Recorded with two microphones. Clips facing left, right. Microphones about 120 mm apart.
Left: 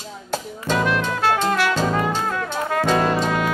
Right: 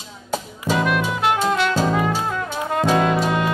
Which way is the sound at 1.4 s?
20° right (ahead or behind).